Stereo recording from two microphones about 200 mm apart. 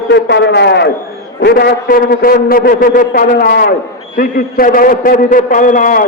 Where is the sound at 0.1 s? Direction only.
60° left (ahead or behind).